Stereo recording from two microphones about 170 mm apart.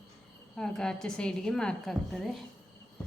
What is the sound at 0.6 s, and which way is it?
A woman's voice, 5° left (ahead or behind).